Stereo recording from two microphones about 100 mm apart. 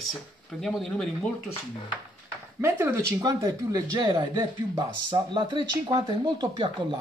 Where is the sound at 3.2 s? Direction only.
35° right (ahead or behind).